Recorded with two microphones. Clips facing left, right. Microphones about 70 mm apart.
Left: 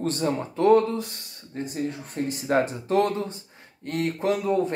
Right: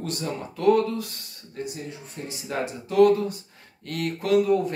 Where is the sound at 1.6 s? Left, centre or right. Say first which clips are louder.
Left 5 dB; left.